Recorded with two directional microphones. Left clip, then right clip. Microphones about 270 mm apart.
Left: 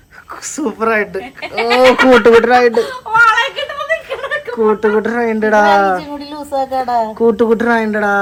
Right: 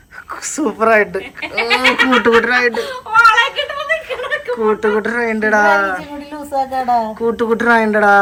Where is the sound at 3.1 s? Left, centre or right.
Left.